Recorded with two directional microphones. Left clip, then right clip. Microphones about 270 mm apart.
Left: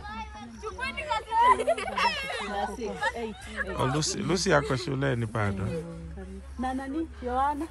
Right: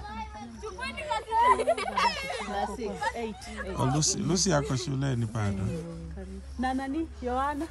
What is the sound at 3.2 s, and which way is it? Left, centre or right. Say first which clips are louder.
Speech: left 3 dB; right.